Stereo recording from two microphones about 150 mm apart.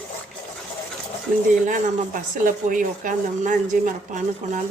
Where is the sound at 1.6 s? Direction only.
60° right (ahead or behind).